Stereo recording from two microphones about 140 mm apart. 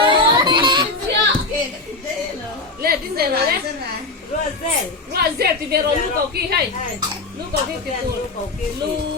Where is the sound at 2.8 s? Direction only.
90° right.